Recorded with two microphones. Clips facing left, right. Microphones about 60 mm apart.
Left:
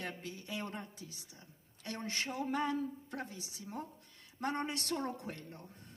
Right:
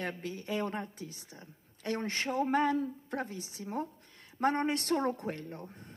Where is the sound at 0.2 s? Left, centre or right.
Right.